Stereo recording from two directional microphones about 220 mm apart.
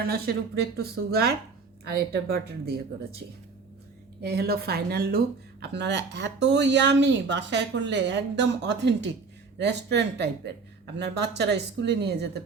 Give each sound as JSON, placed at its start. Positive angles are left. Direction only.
{"t": 0.0, "sound": "speech", "side_deg": -45}
{"t": 4.2, "sound": "speech", "side_deg": -45}